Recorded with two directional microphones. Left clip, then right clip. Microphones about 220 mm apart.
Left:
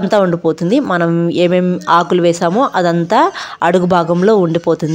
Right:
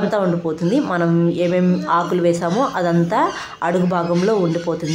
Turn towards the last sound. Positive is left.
turn(degrees=40)  # may be behind; listen again after turning